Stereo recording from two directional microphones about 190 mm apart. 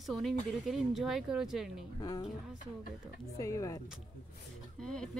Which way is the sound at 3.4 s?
15° left (ahead or behind).